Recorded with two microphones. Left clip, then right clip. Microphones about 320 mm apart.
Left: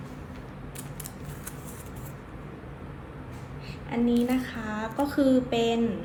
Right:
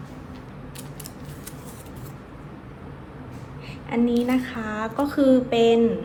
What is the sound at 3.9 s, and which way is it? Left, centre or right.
Speech, centre.